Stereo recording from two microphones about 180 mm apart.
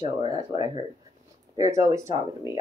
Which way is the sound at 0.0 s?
25° right (ahead or behind).